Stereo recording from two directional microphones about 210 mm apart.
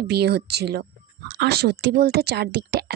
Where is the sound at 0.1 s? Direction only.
50° right (ahead or behind).